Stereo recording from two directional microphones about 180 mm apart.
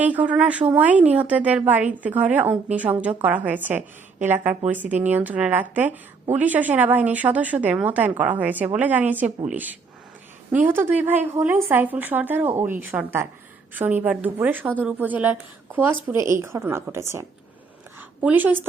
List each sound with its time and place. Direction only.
0.0 s a woman's voice: 10° right (ahead or behind)